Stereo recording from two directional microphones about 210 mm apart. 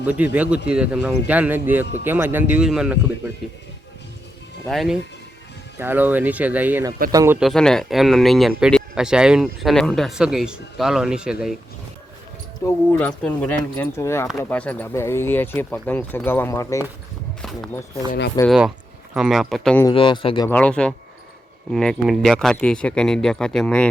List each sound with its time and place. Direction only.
0.0 s speech: 5° right (ahead or behind)
4.6 s speech: centre (ahead or behind); by 7.3 s 15° right (ahead or behind)
7.3 s speech: centre (ahead or behind)
12.6 s speech: 10° left (ahead or behind)
18.4 s speech: centre (ahead or behind)
19.8 s speech: 25° left (ahead or behind)
20.5 s speech: 5° left (ahead or behind)